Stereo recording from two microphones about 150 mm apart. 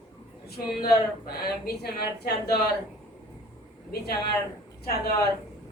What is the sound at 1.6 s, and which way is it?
Speech, 90° left.